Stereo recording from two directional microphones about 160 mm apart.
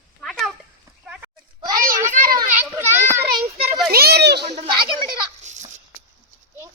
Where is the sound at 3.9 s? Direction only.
80° right.